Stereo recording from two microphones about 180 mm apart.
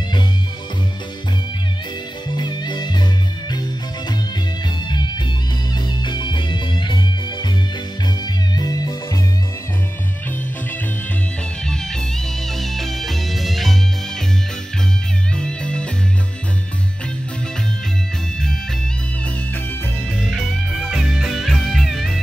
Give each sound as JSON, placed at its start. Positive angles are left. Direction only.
{"t": 2.2, "sound": "music", "side_deg": 25}
{"t": 6.0, "sound": "music", "side_deg": 25}
{"t": 8.5, "sound": "music", "side_deg": 20}
{"t": 11.6, "sound": "music", "side_deg": 5}
{"t": 15.3, "sound": "music", "side_deg": 5}
{"t": 20.2, "sound": "music", "side_deg": 0}